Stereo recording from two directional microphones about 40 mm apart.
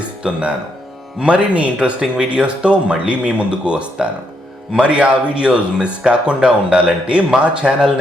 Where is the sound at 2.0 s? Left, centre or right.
Centre.